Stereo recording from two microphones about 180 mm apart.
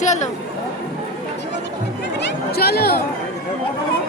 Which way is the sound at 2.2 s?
65° left (ahead or behind).